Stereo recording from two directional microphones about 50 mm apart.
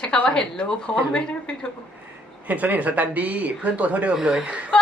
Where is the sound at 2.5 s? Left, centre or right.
Right.